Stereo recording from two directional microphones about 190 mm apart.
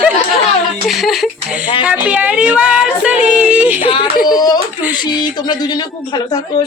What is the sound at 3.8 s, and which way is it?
Speech, 25° left (ahead or behind).